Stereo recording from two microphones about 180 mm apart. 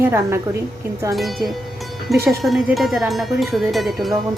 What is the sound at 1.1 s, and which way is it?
Speech, centre (ahead or behind).